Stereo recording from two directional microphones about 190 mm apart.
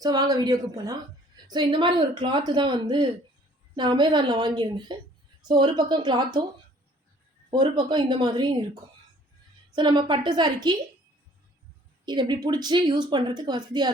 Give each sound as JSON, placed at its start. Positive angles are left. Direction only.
{"t": 0.0, "sound": "speech", "side_deg": -20}
{"t": 7.5, "sound": "speech", "side_deg": -25}
{"t": 9.7, "sound": "speech", "side_deg": -25}
{"t": 12.0, "sound": "speech", "side_deg": -25}